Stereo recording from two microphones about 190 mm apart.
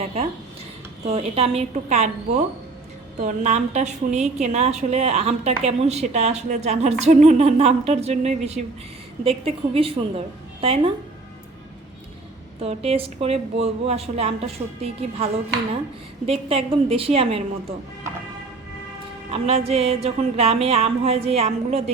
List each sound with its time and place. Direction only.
0.0 s a woman's voice: 35° right (ahead or behind)
12.5 s a woman's voice: 30° right (ahead or behind)
19.3 s a woman's voice: 30° right (ahead or behind)